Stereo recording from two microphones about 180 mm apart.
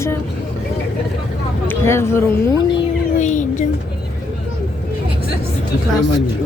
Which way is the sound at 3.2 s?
45° left (ahead or behind).